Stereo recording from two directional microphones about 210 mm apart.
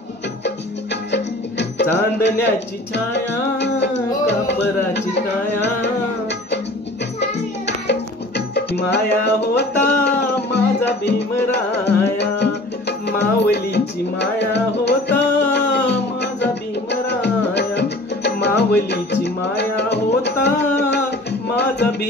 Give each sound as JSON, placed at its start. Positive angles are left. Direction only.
{"t": 1.1, "sound": "music", "side_deg": 55}
{"t": 2.2, "sound": "speech", "side_deg": 55}
{"t": 7.2, "sound": "music", "side_deg": 55}